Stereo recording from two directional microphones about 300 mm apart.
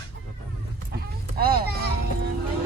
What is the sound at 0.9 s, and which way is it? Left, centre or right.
Vehicle, right.